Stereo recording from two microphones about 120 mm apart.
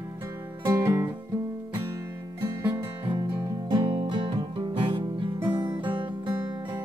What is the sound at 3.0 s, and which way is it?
Music, 40° right (ahead or behind).